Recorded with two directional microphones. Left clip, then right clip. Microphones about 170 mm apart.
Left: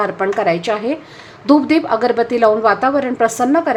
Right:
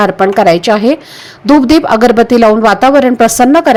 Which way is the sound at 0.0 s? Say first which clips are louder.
Right 9 dB; 35° right (ahead or behind).